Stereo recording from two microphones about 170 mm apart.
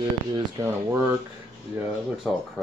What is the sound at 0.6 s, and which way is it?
Speech, 15° right (ahead or behind).